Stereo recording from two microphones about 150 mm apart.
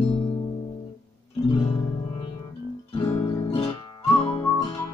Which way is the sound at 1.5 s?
35° left (ahead or behind).